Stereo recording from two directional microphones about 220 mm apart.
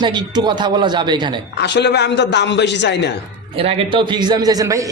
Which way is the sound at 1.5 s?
50° left (ahead or behind).